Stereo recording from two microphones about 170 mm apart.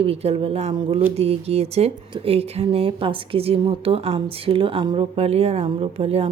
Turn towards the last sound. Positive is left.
turn(degrees=-35)  # may be behind; listen again after turning